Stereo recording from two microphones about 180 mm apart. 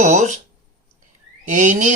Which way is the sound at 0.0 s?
40° right (ahead or behind).